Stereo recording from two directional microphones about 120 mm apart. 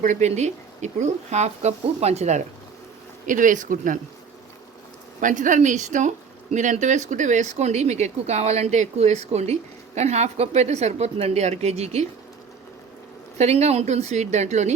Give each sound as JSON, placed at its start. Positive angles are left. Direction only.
{"t": 0.0, "sound": "speech", "side_deg": -85}
{"t": 3.2, "sound": "speech", "side_deg": -90}
{"t": 5.2, "sound": "speech", "side_deg": -90}
{"t": 13.4, "sound": "speech", "side_deg": -65}